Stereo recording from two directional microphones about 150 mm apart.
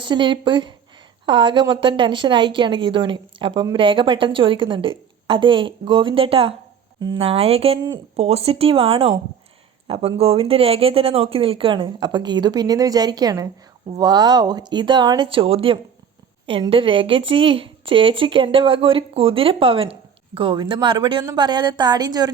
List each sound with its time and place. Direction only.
0.0 s a woman's voice: 30° right (ahead or behind)